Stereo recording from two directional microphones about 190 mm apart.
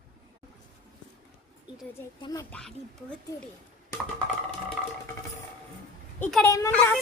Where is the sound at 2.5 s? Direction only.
5° left (ahead or behind).